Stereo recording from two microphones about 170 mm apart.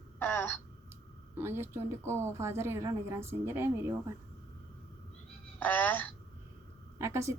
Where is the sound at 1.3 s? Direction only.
15° right (ahead or behind).